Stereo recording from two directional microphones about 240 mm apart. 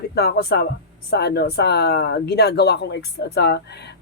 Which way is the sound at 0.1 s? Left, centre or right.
Left.